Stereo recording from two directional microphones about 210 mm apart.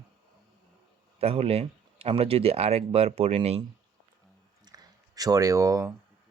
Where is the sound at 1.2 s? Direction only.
30° right (ahead or behind).